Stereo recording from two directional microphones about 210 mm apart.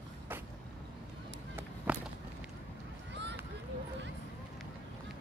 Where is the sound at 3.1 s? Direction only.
55° right (ahead or behind).